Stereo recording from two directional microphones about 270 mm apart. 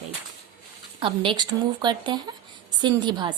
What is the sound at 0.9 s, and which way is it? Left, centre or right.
A woman's voice, centre.